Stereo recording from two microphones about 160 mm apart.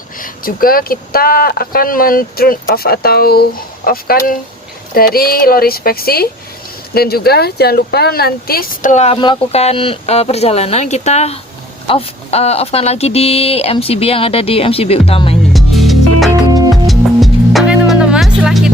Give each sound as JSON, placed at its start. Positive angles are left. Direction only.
{"t": 0.2, "sound": "speech", "side_deg": 65}
{"t": 9.2, "sound": "speech", "side_deg": 35}
{"t": 15.5, "sound": "music", "side_deg": 0}